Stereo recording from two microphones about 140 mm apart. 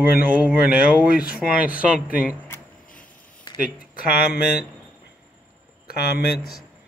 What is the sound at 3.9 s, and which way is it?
Speech, 90° left.